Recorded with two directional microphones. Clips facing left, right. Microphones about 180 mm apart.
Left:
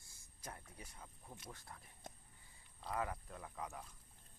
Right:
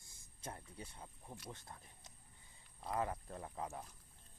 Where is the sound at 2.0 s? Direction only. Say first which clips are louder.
Left 10 dB; 55° left (ahead or behind).